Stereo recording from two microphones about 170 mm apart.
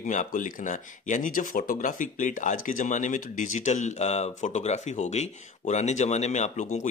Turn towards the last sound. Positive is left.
turn(degrees=45)  # may be behind; listen again after turning